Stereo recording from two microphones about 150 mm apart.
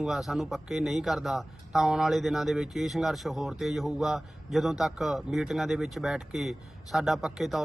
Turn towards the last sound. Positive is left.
turn(degrees=0)  # may be behind; listen again after turning